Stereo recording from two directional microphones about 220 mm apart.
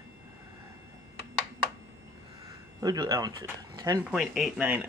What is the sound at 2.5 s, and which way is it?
Speech, 15° right (ahead or behind).